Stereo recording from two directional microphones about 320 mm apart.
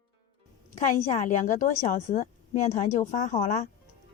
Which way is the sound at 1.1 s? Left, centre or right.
Left.